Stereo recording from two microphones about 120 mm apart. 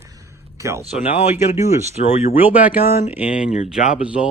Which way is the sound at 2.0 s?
70° left (ahead or behind).